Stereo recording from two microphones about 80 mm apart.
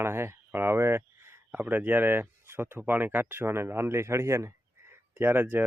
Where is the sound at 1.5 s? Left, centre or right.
Right.